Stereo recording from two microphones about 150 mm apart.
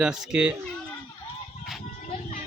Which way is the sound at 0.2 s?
5° right (ahead or behind).